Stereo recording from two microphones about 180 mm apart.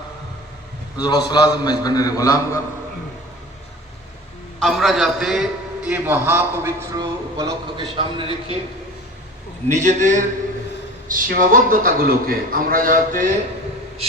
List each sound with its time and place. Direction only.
0.9 s a man's voice: 20° left (ahead or behind)
4.6 s a man's voice: centre (ahead or behind); by 8.5 s 30° right (ahead or behind)
9.6 s a man's voice: 40° right (ahead or behind)